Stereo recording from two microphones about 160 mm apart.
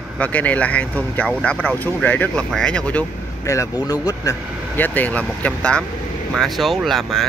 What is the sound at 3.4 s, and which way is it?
Speech, 20° left (ahead or behind).